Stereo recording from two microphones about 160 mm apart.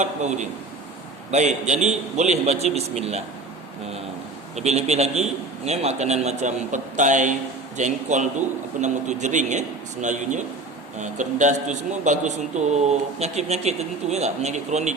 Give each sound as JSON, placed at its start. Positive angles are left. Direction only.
{"t": 0.0, "sound": "a man's voice", "side_deg": -45}
{"t": 4.5, "sound": "a man's voice", "side_deg": -45}